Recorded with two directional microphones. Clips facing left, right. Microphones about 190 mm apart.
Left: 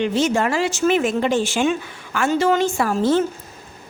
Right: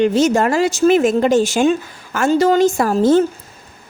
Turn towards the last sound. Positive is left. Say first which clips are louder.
# right 5 dB
turn(degrees=-40)  # may be behind; listen again after turning